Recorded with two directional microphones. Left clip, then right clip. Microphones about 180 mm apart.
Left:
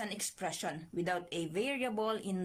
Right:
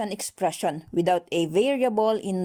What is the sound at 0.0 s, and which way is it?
A woman's voice, 40° right (ahead or behind).